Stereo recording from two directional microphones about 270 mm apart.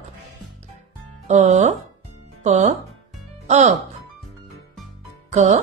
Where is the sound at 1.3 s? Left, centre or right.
Right.